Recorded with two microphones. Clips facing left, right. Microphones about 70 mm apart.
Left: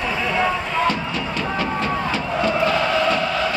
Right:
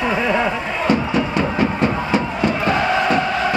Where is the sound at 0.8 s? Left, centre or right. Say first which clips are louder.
Right 8 dB; right.